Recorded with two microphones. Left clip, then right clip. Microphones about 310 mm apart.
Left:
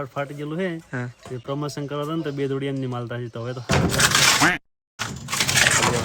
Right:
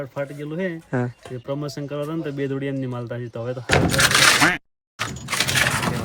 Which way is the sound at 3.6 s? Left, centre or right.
Right.